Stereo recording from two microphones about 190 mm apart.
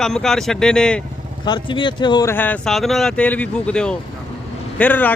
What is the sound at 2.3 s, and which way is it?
Speech, 10° left (ahead or behind).